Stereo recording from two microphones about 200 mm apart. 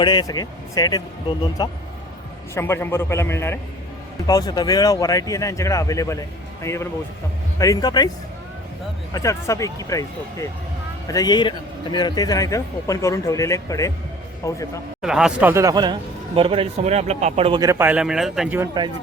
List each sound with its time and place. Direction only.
0.0 s a man's voice: 20° left (ahead or behind)
9.1 s a man's voice: 15° left (ahead or behind)
15.0 s speech: 5° right (ahead or behind)
18.6 s speech: 20° right (ahead or behind)